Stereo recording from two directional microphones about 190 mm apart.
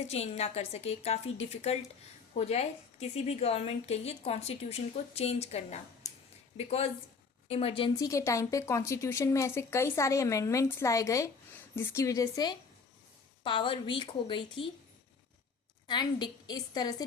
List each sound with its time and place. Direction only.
0.0 s a woman's voice: 35° left (ahead or behind)
15.9 s a woman's voice: 20° left (ahead or behind)